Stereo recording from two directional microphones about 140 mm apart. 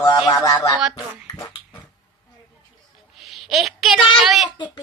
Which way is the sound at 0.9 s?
30° left (ahead or behind).